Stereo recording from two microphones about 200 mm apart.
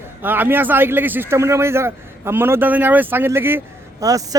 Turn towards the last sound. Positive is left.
turn(degrees=-15)  # may be behind; listen again after turning